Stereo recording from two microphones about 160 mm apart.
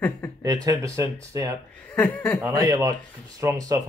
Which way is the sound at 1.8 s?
10° left (ahead or behind).